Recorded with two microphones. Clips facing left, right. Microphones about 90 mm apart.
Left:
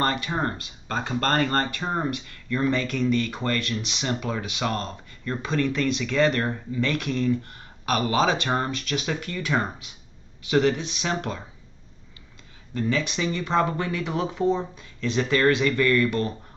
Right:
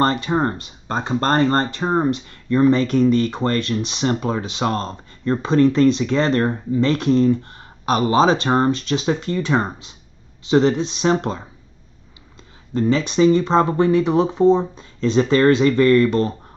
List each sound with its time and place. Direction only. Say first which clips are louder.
0.0 s speech: right 7 dB; 30° right (ahead or behind)
12.7 s speech: right 8 dB; 30° right (ahead or behind)